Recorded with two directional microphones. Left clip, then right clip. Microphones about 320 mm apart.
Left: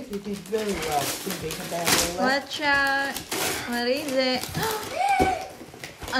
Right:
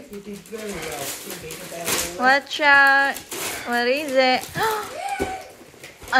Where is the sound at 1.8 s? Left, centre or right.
Centre.